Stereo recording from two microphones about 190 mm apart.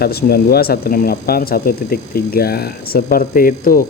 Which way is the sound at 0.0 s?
55° left (ahead or behind).